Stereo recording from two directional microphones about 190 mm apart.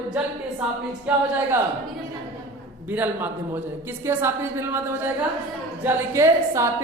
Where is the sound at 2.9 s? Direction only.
10° right (ahead or behind).